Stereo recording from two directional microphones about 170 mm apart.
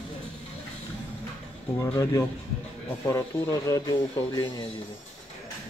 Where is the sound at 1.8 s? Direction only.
20° left (ahead or behind).